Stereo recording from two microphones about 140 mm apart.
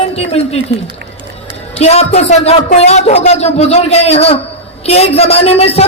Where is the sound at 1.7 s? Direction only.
50° left (ahead or behind).